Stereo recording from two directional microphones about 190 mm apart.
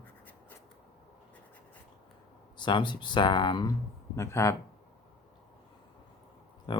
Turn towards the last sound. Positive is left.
turn(degrees=25)  # may be behind; listen again after turning